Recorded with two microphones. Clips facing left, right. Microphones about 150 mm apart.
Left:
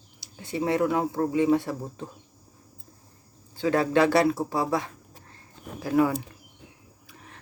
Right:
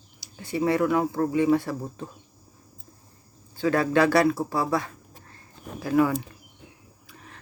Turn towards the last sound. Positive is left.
turn(degrees=20)  # may be behind; listen again after turning